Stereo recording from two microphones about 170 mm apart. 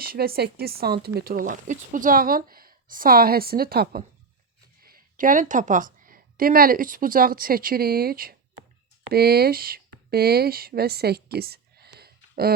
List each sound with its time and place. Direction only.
0.0 s a woman's voice: 60° right (ahead or behind)